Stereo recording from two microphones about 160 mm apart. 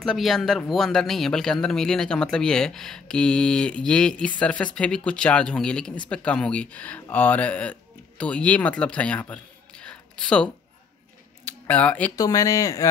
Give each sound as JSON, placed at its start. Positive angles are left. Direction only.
{"t": 0.0, "sound": "speech", "side_deg": 0}
{"t": 11.4, "sound": "a sound", "side_deg": 10}
{"t": 12.2, "sound": "speech", "side_deg": 20}